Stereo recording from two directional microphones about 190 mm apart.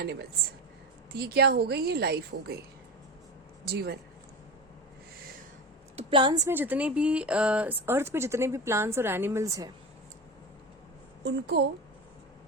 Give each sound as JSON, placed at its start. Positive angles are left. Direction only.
{"t": 0.0, "sound": "a woman's voice", "side_deg": -60}
{"t": 3.7, "sound": "a woman's voice", "side_deg": -55}
{"t": 6.0, "sound": "speech", "side_deg": -25}
{"t": 11.2, "sound": "a woman's voice", "side_deg": -60}